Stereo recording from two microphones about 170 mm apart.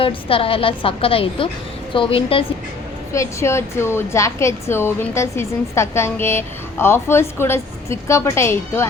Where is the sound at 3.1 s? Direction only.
15° left (ahead or behind).